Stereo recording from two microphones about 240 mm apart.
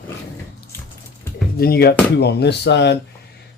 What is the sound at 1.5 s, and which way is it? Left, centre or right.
Speech, left.